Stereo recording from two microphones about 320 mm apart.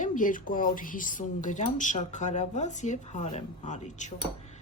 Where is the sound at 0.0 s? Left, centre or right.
Left.